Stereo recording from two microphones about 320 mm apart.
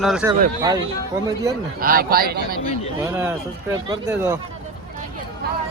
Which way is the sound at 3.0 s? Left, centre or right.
Centre.